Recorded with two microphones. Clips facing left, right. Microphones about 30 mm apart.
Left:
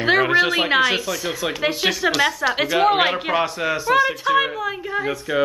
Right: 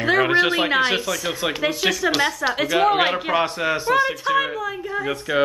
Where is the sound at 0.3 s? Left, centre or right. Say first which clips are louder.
Left 1 dB; right.